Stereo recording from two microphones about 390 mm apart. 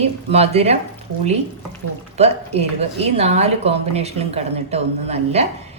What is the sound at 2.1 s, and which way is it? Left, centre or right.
Speech, centre.